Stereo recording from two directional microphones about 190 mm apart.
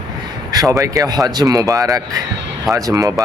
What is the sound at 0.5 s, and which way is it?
Speech, 20° right (ahead or behind).